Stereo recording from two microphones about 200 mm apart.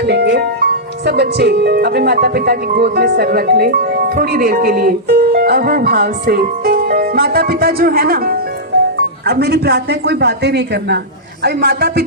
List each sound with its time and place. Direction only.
0.0 s speech: 55° right (ahead or behind)